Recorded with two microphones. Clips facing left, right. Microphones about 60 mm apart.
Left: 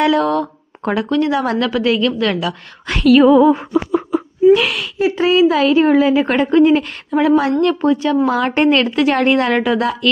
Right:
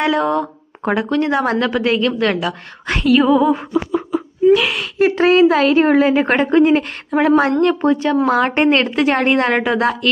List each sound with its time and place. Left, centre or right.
0.0 s speech: right
1.1 s a woman's voice: right
3.1 s speech: centre
3.7 s a sound: left
4.5 s whimper: centre
4.9 s a woman's voice: right